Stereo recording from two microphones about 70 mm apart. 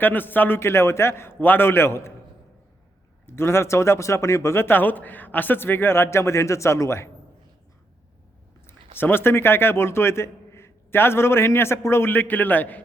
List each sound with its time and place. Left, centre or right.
0.0 s speech: left
3.2 s speech: left
8.6 s a man's voice: left